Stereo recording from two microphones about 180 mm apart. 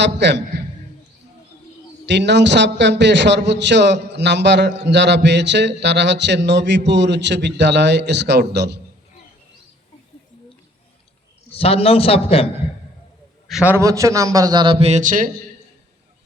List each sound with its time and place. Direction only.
0.0 s a man's voice: 75° right (ahead or behind)
2.0 s a man's voice: 75° right (ahead or behind)
11.5 s a man's voice: 35° left (ahead or behind)
13.5 s a man's voice: 5° right (ahead or behind); by 15.3 s 45° right (ahead or behind)